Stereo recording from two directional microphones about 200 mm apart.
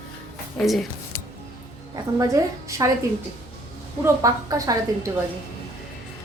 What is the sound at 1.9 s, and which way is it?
A woman's voice, 15° right (ahead or behind).